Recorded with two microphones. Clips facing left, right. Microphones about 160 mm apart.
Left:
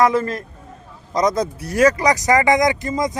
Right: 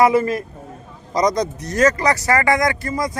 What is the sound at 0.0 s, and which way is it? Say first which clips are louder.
Speech: right 2 dB; 10° right (ahead or behind).